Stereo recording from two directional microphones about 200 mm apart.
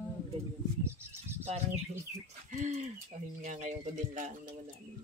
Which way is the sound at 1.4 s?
30° right (ahead or behind).